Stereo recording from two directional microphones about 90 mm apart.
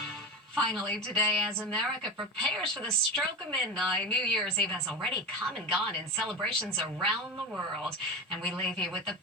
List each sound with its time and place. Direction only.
0.5 s a woman's voice: 5° left (ahead or behind)
8.4 s speech: 5° left (ahead or behind)